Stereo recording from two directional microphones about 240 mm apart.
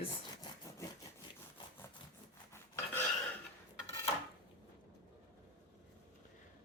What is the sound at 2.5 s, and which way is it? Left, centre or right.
Filing, centre.